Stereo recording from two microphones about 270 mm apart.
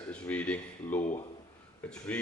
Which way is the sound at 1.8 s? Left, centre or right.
Centre.